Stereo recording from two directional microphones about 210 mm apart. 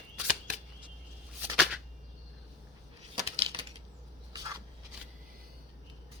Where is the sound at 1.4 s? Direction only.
5° right (ahead or behind).